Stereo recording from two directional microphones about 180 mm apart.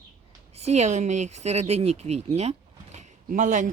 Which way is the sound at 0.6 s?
40° right (ahead or behind).